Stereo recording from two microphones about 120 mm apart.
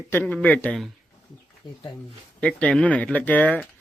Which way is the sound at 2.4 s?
10° left (ahead or behind).